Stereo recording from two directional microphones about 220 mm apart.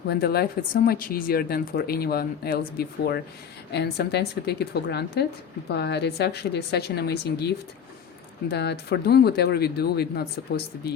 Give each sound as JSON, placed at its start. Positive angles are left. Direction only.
{"t": 0.1, "sound": "speech", "side_deg": 45}